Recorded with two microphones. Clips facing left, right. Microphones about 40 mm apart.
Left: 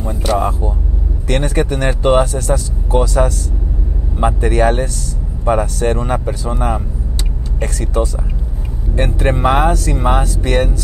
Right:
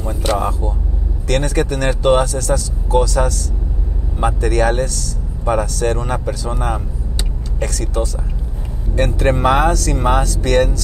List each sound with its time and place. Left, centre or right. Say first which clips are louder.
0.1 s vehicle: left 2 dB; centre
1.2 s speech: left 1 dB; left
7.6 s speech: left 2 dB; left
8.9 s speech: right 1 dB; centre